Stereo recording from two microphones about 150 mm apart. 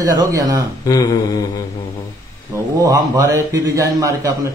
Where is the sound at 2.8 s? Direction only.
25° right (ahead or behind).